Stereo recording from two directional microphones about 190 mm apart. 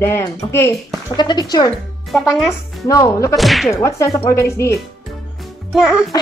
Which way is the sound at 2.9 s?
15° left (ahead or behind).